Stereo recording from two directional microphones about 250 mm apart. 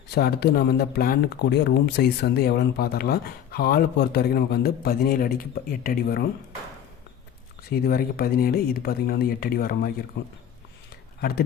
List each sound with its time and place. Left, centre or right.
0.1 s speech: left
7.7 s speech: left